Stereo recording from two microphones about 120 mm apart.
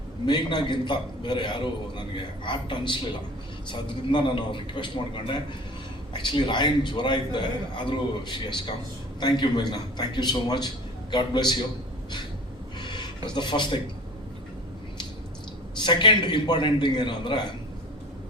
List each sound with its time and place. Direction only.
0.3 s a man's voice: 40° left (ahead or behind)
12.8 s a sound: 40° left (ahead or behind)
15.8 s a man's voice: 40° left (ahead or behind)